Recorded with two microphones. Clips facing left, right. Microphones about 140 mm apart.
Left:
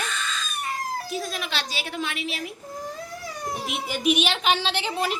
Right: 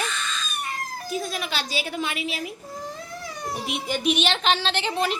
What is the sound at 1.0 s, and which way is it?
Speech, centre (ahead or behind).